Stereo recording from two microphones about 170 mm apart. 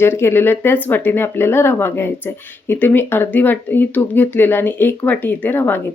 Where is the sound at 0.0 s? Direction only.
15° left (ahead or behind).